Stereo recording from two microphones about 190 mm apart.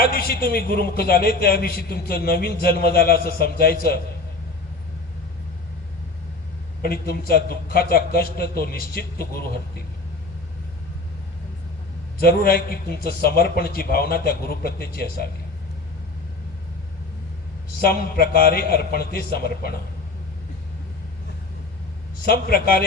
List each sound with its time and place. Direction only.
0.1 s a man's voice: 50° left (ahead or behind)
6.8 s a man's voice: 55° left (ahead or behind)
12.2 s a man's voice: 50° left (ahead or behind)
17.8 s a man's voice: 50° left (ahead or behind)
22.3 s a man's voice: 50° left (ahead or behind)